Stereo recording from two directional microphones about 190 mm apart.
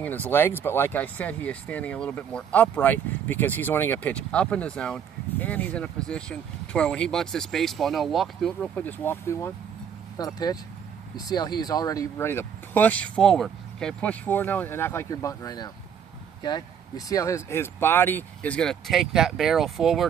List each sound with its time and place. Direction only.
0.0 s speech: 10° left (ahead or behind)